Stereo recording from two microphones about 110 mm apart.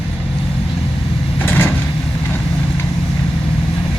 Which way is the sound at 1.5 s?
20° left (ahead or behind).